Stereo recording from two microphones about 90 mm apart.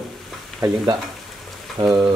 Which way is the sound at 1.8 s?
80° right.